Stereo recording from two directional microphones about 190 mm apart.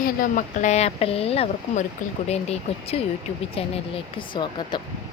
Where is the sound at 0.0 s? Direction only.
45° left (ahead or behind).